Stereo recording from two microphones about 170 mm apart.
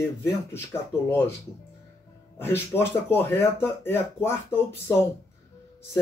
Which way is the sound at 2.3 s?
15° left (ahead or behind).